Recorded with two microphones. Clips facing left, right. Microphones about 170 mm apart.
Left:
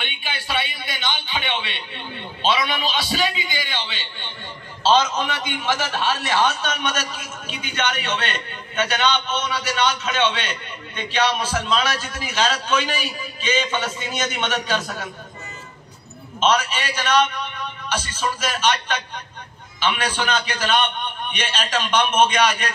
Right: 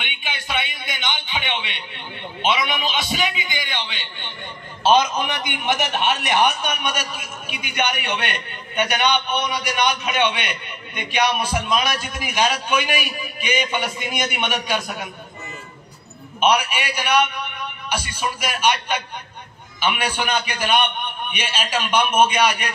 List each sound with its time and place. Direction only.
0.2 s a sound: 20° right (ahead or behind)
2.4 s a man's voice: 20° right (ahead or behind)
16.3 s a man's voice: 15° right (ahead or behind)